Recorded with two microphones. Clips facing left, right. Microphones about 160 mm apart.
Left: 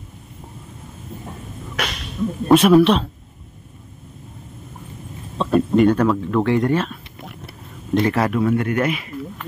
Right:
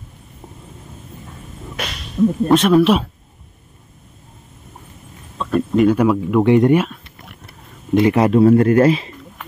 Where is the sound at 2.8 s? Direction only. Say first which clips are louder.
Right 1 dB; 5° right (ahead or behind).